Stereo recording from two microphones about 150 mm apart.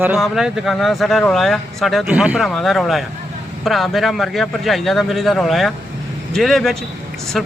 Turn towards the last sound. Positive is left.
turn(degrees=0)  # may be behind; listen again after turning